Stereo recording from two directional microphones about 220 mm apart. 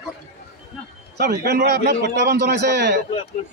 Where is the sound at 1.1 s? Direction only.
50° right (ahead or behind).